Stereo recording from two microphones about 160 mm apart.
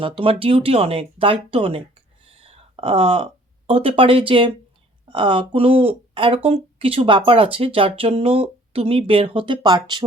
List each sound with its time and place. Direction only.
0.0 s speech: 35° right (ahead or behind)